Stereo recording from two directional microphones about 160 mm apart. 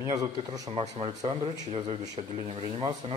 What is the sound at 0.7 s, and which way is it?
Speech, 35° right (ahead or behind).